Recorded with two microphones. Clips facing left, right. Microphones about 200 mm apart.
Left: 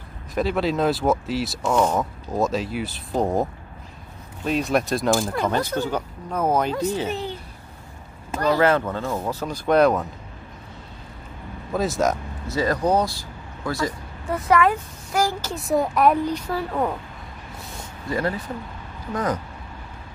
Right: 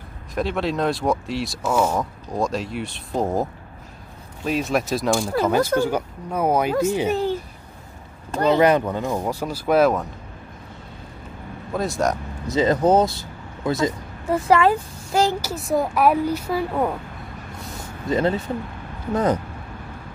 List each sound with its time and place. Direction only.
0.3 s speech: centre (ahead or behind)
4.5 s speech: centre (ahead or behind)
5.8 s speech: 10° right (ahead or behind)
8.4 s speech: 20° right (ahead or behind); by 10.0 s 5° right (ahead or behind)
11.7 s speech: centre (ahead or behind)
12.4 s speech: 20° right (ahead or behind)
15.4 s speech: centre (ahead or behind)
18.0 s speech: 20° right (ahead or behind)